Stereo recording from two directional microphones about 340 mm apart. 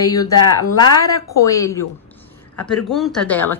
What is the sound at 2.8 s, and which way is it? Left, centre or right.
Speech, centre.